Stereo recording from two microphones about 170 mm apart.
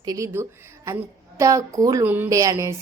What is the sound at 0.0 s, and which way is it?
A woman's voice, 20° right (ahead or behind).